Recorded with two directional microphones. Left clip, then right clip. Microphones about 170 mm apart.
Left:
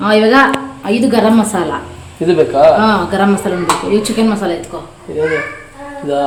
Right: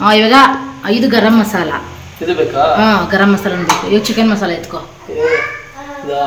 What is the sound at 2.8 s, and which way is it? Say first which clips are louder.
A woman's voice: right 1 dB; 10° right (ahead or behind).